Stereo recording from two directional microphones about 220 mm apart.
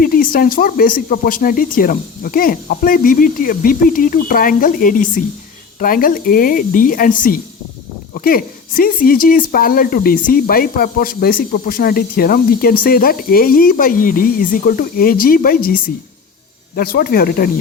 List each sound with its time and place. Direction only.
0.0 s speech: 40° left (ahead or behind)